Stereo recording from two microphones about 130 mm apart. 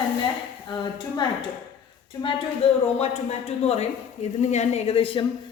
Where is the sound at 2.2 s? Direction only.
40° left (ahead or behind).